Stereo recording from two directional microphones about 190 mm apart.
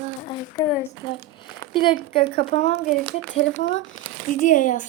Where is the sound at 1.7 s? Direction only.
25° left (ahead or behind).